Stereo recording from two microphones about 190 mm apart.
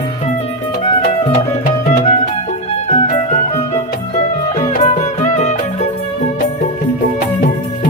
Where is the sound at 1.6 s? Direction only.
40° left (ahead or behind).